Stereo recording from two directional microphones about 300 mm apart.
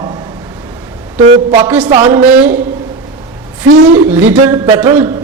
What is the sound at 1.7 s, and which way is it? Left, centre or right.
Music, centre.